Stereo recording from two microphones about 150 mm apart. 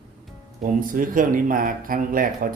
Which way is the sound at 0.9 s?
65° right (ahead or behind).